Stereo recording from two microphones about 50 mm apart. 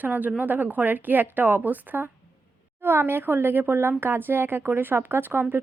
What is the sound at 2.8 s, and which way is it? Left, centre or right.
A woman's voice, right.